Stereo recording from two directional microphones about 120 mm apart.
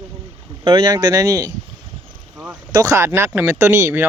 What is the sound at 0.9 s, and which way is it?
Speech, 30° right (ahead or behind).